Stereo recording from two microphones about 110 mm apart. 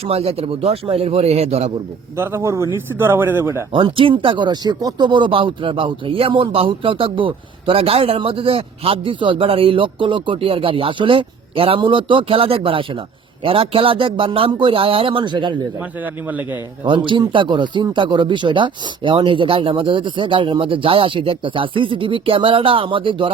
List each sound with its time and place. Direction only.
0.0 s a man's voice: 65° right (ahead or behind)
2.1 s speech: 20° right (ahead or behind)
3.7 s speech: 50° right (ahead or behind)
16.8 s speech: 45° right (ahead or behind)